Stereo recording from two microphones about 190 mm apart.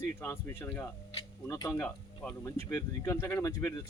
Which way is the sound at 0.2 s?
10° left (ahead or behind).